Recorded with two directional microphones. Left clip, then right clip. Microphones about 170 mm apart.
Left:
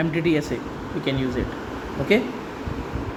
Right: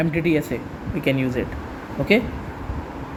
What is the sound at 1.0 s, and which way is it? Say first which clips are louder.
Speech: right 3 dB; 45° right (ahead or behind).